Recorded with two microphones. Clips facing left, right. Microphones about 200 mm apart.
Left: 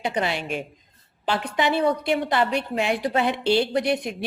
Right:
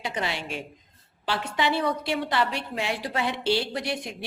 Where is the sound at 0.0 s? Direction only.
20° left (ahead or behind).